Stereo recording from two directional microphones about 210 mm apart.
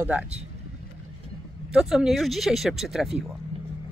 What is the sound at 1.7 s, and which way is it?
Speech, centre (ahead or behind).